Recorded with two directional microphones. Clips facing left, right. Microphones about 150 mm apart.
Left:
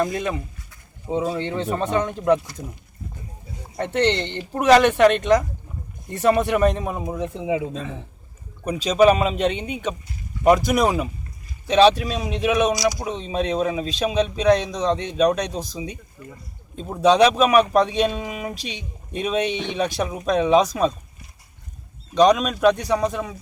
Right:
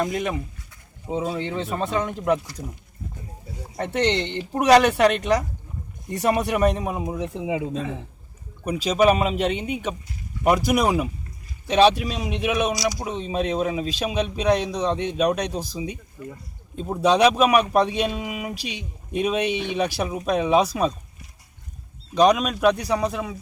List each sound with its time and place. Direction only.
0.0 s speech: 15° right (ahead or behind)
3.8 s speech: 10° right (ahead or behind)
12.7 s speech: 25° right (ahead or behind)
13.0 s speech: 10° right (ahead or behind)
22.1 s speech: 10° right (ahead or behind)